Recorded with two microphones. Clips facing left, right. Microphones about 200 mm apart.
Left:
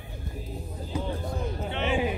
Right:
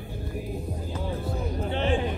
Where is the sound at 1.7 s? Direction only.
35° right (ahead or behind).